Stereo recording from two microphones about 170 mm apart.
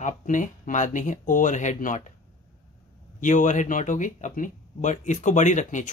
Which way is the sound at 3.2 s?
50° left (ahead or behind).